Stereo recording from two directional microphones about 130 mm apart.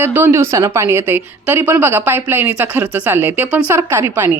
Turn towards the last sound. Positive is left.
turn(degrees=-15)  # may be behind; listen again after turning